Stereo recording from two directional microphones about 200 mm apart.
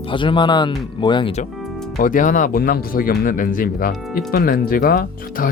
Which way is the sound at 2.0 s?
40° left (ahead or behind).